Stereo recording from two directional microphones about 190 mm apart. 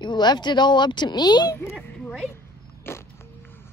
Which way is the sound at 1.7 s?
Centre (ahead or behind).